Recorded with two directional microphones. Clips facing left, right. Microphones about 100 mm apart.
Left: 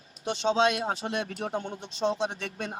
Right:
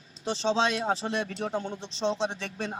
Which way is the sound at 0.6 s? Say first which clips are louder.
Left 1 dB; 30° right (ahead or behind).